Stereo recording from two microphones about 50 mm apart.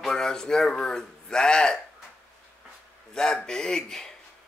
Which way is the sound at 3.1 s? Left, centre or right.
Centre.